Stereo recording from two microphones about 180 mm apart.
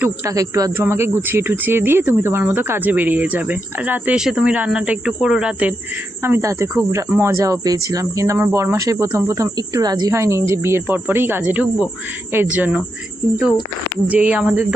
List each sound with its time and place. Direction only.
0.0 s speech: 20° right (ahead or behind)
14.1 s speech: 5° right (ahead or behind)